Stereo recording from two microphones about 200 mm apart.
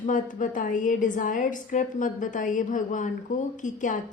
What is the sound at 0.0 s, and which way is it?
A woman's voice, 40° left (ahead or behind).